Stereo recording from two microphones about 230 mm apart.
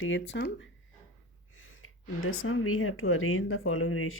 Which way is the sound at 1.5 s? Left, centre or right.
Left.